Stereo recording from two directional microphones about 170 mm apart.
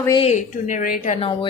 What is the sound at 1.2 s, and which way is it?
Speech, 30° left (ahead or behind).